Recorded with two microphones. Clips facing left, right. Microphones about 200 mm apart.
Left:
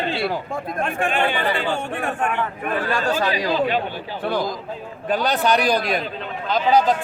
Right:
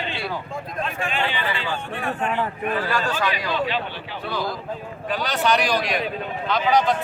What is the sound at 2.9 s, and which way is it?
Speech, 40° left (ahead or behind).